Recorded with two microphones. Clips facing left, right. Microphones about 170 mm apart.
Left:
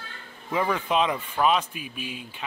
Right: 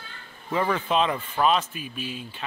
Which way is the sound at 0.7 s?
10° left (ahead or behind).